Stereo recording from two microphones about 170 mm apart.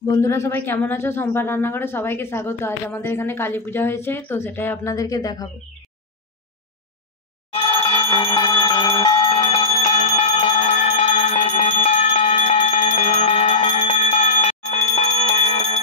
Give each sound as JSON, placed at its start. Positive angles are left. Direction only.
{"t": 0.0, "sound": "speech", "side_deg": 20}
{"t": 7.5, "sound": "bicycle bell", "side_deg": 30}
{"t": 12.9, "sound": "bell", "side_deg": 40}
{"t": 15.0, "sound": "bell", "side_deg": 30}